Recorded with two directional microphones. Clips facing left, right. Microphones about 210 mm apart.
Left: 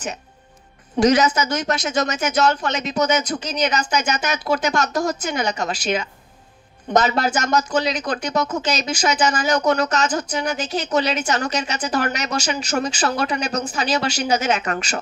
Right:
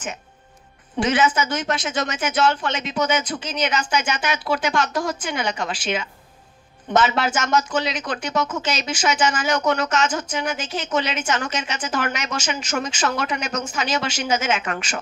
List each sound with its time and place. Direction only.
0.9 s speech: 40° left (ahead or behind)